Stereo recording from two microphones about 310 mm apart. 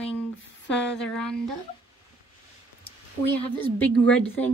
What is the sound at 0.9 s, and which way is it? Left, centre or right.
Speech, centre.